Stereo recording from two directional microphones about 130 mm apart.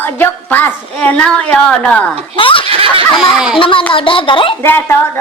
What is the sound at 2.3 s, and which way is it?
Snicker, 40° left (ahead or behind).